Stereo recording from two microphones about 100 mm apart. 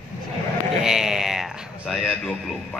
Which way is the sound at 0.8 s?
5° right (ahead or behind).